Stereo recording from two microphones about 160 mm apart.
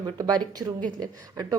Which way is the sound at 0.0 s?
25° right (ahead or behind).